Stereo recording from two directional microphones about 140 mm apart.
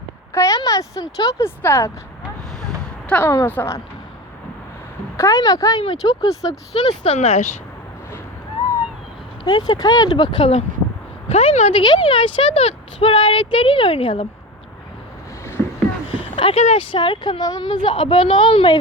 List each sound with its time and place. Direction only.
0.3 s speech: 25° left (ahead or behind)
2.6 s a sound: 5° left (ahead or behind)
3.2 s speech: 15° left (ahead or behind)
5.1 s speech: 20° left (ahead or behind)
7.1 s speech: 50° left (ahead or behind)
9.4 s speech: 30° left (ahead or behind)
16.3 s a sound: 35° left (ahead or behind)
16.7 s speech: 35° left (ahead or behind)